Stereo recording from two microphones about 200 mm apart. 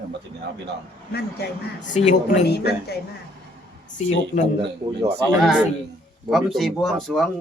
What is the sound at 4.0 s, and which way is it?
Speech, 35° left (ahead or behind).